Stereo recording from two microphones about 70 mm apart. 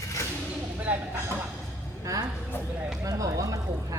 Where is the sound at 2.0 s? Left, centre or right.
Right.